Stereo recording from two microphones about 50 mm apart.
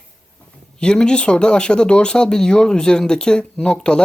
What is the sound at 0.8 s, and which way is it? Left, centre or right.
Speech, centre.